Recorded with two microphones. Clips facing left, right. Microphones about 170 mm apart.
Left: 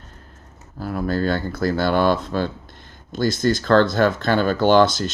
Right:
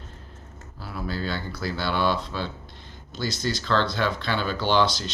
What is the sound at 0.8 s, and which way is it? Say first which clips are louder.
Speech: left 9 dB; 50° left (ahead or behind).